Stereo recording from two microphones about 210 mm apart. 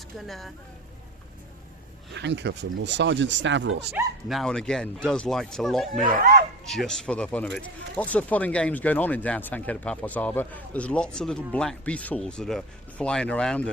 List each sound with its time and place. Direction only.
0.2 s speech: centre (ahead or behind)
2.1 s speech: 55° right (ahead or behind)
3.9 s speech: centre (ahead or behind)
5.9 s speech: 30° right (ahead or behind)
6.7 s speech: centre (ahead or behind)